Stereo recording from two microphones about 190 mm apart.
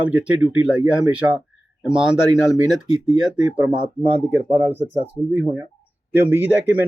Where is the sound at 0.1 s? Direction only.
5° right (ahead or behind).